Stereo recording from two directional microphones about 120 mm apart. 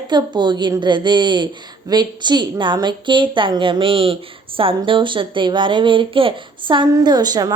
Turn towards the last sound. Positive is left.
turn(degrees=-35)  # may be behind; listen again after turning